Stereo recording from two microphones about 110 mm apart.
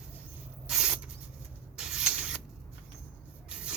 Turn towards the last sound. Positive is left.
turn(degrees=-10)  # may be behind; listen again after turning